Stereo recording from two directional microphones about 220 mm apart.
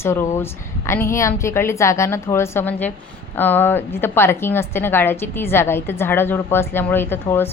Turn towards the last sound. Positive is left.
turn(degrees=10)  # may be behind; listen again after turning